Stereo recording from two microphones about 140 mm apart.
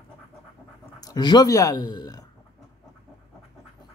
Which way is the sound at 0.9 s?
30° left (ahead or behind).